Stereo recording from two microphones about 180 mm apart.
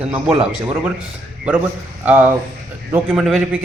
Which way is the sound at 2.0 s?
10° right (ahead or behind).